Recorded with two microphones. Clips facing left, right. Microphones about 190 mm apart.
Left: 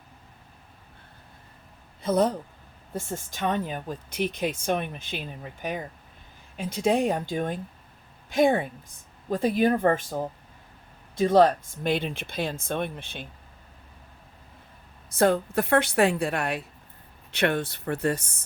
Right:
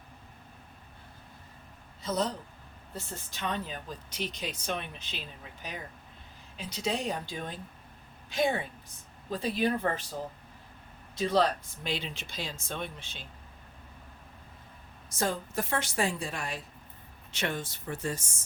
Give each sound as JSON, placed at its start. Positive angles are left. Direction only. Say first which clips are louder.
{"t": 2.0, "sound": "a man's voice", "louder": "left 8 dB", "side_deg": 55}
{"t": 15.1, "sound": "speech", "louder": "left 10 dB", "side_deg": 60}